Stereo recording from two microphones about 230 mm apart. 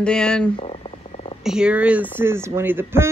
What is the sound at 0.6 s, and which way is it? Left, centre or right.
Frog, left.